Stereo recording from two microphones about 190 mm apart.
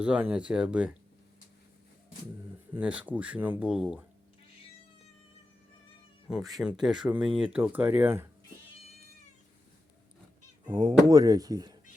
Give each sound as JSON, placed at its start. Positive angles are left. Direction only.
{"t": 0.0, "sound": "speech", "side_deg": -5}
{"t": 2.7, "sound": "speech", "side_deg": -5}
{"t": 6.2, "sound": "speech", "side_deg": 0}
{"t": 10.7, "sound": "speech", "side_deg": -25}